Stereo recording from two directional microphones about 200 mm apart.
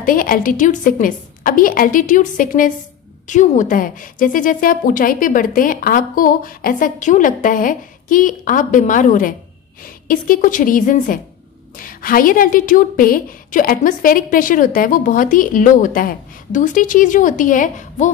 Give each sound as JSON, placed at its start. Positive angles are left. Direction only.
{"t": 0.0, "sound": "a woman's voice", "side_deg": 45}